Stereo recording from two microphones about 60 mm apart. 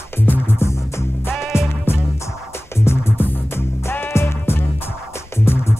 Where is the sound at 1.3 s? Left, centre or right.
Centre.